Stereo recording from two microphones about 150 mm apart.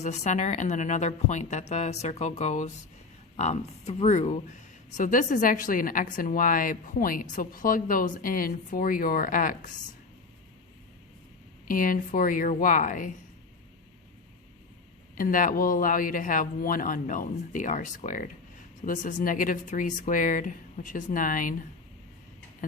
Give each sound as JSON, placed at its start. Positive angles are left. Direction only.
{"t": 0.0, "sound": "a woman's voice", "side_deg": 50}
{"t": 11.7, "sound": "speech", "side_deg": 65}
{"t": 15.1, "sound": "speech", "side_deg": 70}